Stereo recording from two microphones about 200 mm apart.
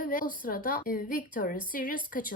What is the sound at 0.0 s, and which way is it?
Speech, 45° left (ahead or behind).